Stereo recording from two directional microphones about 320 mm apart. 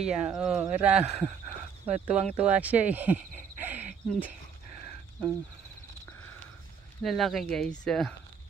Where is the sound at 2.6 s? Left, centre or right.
Centre.